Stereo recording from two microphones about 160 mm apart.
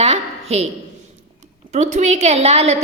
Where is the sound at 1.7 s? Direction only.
50° right (ahead or behind).